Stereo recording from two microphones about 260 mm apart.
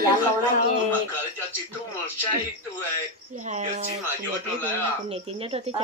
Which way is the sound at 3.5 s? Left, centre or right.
Right.